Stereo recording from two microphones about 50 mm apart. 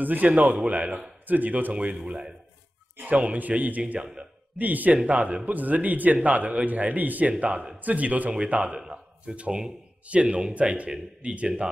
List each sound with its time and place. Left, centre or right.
0.0 s a man's voice: right
1.2 s a man's voice: right
4.0 s speech: centre
4.6 s a man's voice: right
4.9 s a man's voice: right